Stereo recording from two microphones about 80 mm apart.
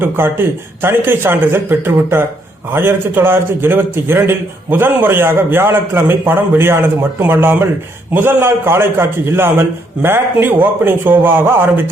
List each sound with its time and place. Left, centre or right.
0.0 s a man's voice: right